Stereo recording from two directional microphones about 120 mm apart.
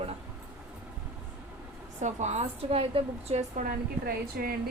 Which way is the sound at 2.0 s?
70° right (ahead or behind).